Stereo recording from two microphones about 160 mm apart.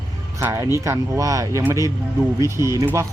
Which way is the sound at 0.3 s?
15° right (ahead or behind).